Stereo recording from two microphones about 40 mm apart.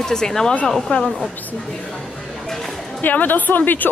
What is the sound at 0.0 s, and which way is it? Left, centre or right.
Speech, centre.